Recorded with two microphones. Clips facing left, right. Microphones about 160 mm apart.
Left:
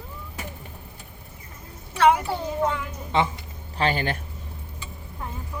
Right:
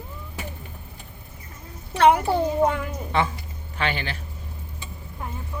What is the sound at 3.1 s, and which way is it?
Speech, 20° left (ahead or behind).